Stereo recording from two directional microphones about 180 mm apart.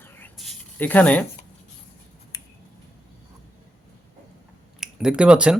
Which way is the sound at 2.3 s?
20° left (ahead or behind).